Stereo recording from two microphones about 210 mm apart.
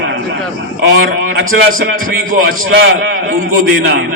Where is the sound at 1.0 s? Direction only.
50° right (ahead or behind).